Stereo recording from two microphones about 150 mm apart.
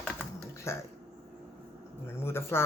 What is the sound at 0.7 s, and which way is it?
Speech, 20° left (ahead or behind).